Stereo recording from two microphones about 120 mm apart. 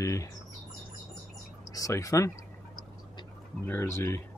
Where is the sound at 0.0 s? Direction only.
25° left (ahead or behind).